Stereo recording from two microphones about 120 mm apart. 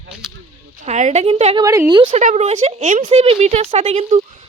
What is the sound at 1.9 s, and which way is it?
Speech, 40° right (ahead or behind).